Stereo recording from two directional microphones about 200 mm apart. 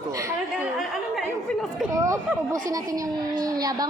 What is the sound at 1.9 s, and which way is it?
Speech, 15° right (ahead or behind).